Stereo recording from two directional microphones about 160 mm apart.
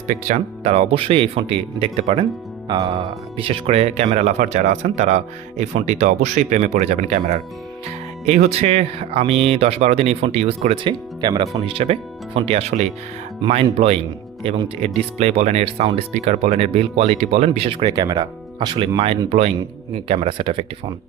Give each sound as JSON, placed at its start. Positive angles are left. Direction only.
{"t": 0.1, "sound": "speech", "side_deg": -45}
{"t": 2.6, "sound": "music", "side_deg": -25}
{"t": 2.9, "sound": "speech", "side_deg": -35}
{"t": 11.2, "sound": "speech", "side_deg": -30}